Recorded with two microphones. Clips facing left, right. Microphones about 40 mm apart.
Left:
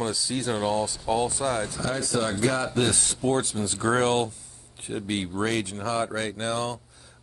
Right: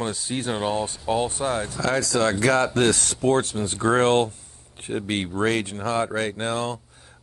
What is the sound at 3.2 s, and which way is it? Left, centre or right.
Speech, right.